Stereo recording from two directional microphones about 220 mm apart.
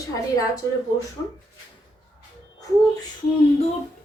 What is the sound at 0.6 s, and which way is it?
Speech, 15° left (ahead or behind).